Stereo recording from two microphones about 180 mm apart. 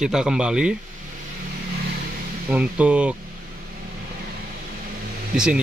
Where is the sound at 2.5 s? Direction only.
5° right (ahead or behind).